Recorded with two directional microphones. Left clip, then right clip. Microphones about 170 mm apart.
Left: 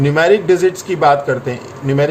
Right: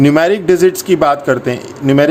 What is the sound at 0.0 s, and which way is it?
A man's voice, 75° right (ahead or behind).